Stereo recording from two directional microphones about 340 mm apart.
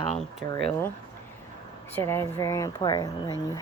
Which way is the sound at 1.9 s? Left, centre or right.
Centre.